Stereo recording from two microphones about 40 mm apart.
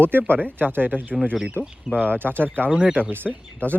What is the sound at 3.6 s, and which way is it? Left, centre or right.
Speech, right.